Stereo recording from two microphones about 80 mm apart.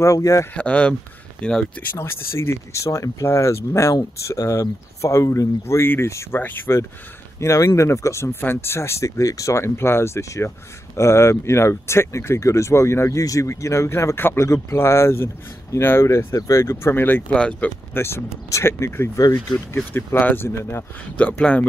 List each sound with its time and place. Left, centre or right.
0.0 s speech: left
0.6 s speech: centre
2.0 s speech: left
7.3 s speech: left
9.2 s speech: left
17.4 s speech: centre
17.9 s speech: left
21.2 s speech: centre